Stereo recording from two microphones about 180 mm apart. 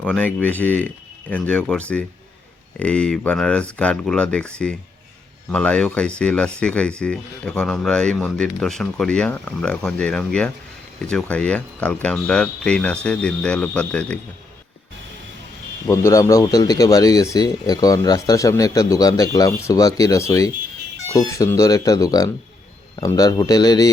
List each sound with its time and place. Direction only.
0.0 s speech: 5° left (ahead or behind)
15.9 s speech: 15° left (ahead or behind)